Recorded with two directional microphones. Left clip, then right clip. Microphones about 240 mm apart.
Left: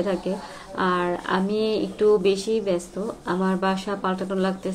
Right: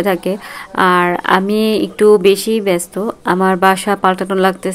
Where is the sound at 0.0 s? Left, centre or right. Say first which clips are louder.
Right 10 dB; right.